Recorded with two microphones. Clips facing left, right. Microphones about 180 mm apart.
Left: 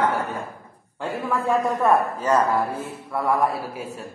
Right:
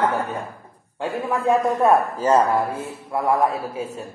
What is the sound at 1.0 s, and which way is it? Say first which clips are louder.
Speech: right 2 dB; 20° right (ahead or behind).